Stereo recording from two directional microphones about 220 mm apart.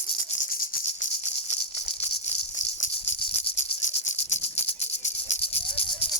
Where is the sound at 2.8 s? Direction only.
30° left (ahead or behind).